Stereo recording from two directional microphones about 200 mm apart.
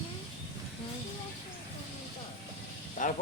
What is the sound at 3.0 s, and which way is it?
Speech, 40° left (ahead or behind).